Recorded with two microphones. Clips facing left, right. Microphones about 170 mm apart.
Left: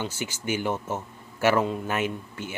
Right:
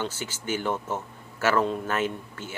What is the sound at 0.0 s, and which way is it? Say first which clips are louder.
Speech: left 1 dB; 15° left (ahead or behind).